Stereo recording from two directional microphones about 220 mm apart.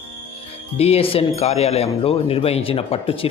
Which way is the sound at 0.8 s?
25° left (ahead or behind).